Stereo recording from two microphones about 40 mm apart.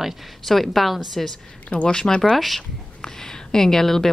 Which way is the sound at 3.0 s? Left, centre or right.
Centre.